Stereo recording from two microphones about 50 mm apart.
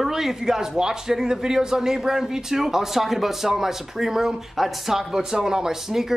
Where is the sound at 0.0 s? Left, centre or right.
Centre.